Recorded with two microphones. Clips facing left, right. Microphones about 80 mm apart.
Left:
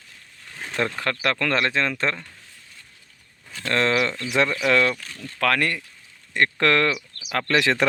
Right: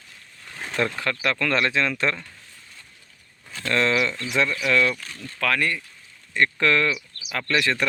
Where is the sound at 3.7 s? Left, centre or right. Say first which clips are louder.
Left 1 dB; left.